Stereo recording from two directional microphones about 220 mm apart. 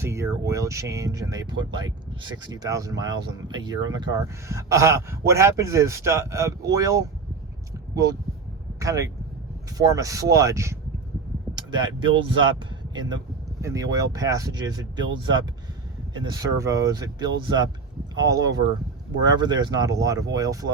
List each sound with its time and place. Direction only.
0.0 s speech: 10° right (ahead or behind)
8.8 s speech: 15° right (ahead or behind)